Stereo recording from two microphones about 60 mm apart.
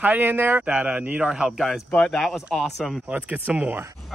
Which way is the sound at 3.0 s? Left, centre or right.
Right.